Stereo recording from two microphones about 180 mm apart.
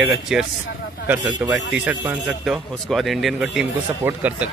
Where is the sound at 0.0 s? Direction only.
5° right (ahead or behind).